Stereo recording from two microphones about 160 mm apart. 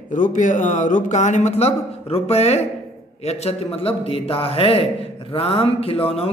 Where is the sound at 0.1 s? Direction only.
50° left (ahead or behind).